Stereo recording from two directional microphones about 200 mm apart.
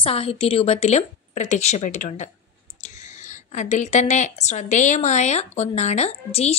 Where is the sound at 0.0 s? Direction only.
30° left (ahead or behind).